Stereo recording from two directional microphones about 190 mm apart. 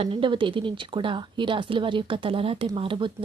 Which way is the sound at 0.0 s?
25° right (ahead or behind).